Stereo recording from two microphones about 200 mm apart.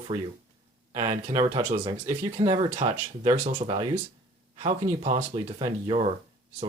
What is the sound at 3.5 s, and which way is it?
Speech, 25° right (ahead or behind).